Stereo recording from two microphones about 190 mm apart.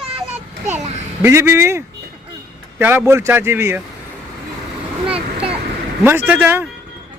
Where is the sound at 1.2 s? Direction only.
15° right (ahead or behind).